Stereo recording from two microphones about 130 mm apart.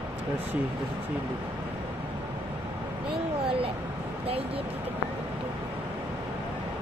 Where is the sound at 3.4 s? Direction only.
45° right (ahead or behind).